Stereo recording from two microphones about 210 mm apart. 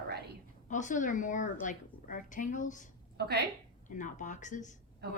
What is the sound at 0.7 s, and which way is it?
A woman's voice, 35° left (ahead or behind).